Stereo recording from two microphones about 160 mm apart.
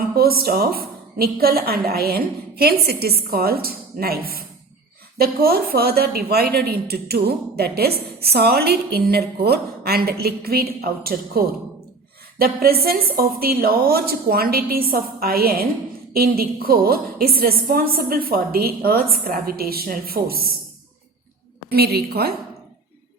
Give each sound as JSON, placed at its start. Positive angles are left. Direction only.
{"t": 0.2, "sound": "speech", "side_deg": -70}
{"t": 21.7, "sound": "speech", "side_deg": -80}